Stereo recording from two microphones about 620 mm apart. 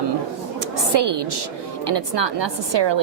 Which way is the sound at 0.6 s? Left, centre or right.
Right.